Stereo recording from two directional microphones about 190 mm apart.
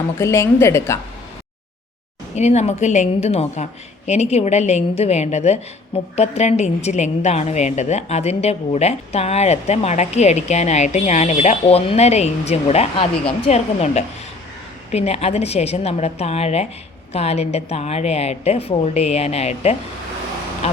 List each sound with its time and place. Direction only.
0.2 s a woman's voice: 15° left (ahead or behind)
2.3 s a woman's voice: 35° left (ahead or behind)